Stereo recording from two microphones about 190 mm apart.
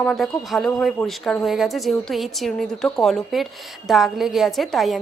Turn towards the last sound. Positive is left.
turn(degrees=0)  # may be behind; listen again after turning